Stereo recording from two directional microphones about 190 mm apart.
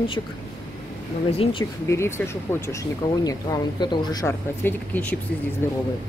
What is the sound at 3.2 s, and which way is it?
Speech, 20° left (ahead or behind).